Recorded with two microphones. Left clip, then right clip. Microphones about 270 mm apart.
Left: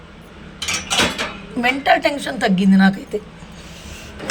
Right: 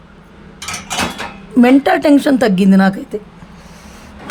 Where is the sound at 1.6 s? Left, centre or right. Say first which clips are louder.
Right 4 dB; right.